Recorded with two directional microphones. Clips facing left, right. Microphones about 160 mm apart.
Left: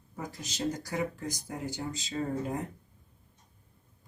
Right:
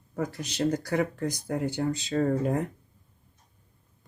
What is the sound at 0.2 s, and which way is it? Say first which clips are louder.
Speech: right 7 dB; 65° right (ahead or behind).